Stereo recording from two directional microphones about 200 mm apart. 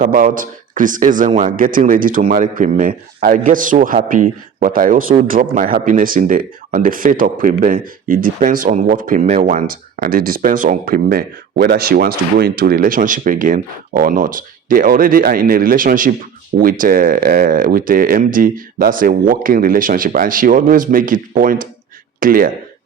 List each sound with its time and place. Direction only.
0.0 s a man's voice: 45° right (ahead or behind)